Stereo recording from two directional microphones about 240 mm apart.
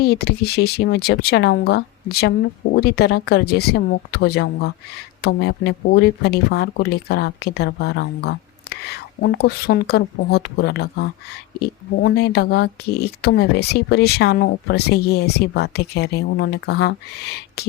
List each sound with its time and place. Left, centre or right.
0.0 s speech: left